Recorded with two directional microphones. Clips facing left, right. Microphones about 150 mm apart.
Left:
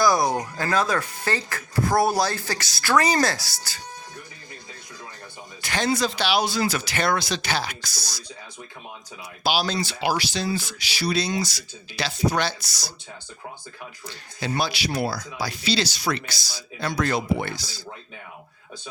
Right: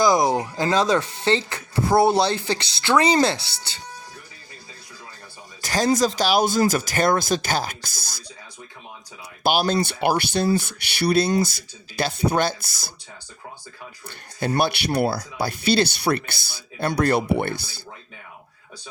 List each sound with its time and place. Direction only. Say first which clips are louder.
0.0 s speech: right 2 dB; 20° right (ahead or behind)
5.6 s speech: right 4 dB; 40° right (ahead or behind)
9.4 s speech: right 4 dB; 50° right (ahead or behind)
14.1 s speech: right 4 dB; 55° right (ahead or behind)